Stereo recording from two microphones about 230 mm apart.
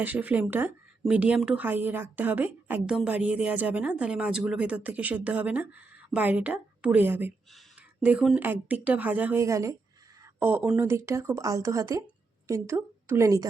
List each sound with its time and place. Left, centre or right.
0.0 s speech: centre